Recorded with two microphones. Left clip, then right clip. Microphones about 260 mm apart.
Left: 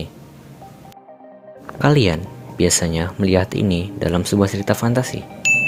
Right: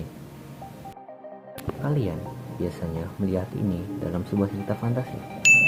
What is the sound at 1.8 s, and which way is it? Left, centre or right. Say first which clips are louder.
Speech: left 14 dB; left.